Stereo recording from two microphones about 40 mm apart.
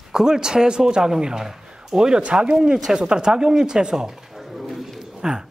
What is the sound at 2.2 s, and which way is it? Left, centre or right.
A woman's voice, right.